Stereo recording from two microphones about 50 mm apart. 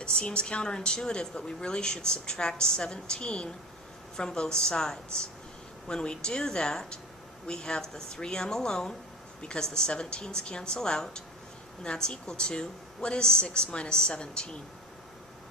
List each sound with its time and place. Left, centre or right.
0.0 s a woman's voice: centre